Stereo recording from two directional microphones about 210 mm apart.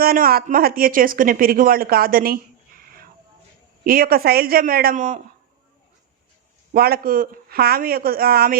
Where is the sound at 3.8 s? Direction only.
45° right (ahead or behind).